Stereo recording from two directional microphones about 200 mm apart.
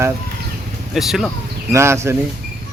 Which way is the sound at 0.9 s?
Centre (ahead or behind).